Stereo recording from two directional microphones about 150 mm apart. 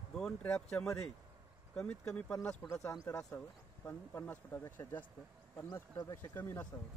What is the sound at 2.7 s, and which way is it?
Speech, 20° left (ahead or behind).